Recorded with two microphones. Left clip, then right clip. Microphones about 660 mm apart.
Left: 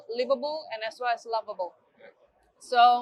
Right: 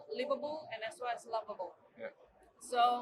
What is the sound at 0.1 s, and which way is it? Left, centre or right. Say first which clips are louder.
A man's voice: left 9 dB; left.